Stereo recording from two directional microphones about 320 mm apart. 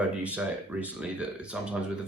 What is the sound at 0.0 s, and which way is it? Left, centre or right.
Speech, centre.